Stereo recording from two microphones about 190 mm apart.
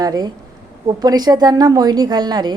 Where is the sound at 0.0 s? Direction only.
20° right (ahead or behind).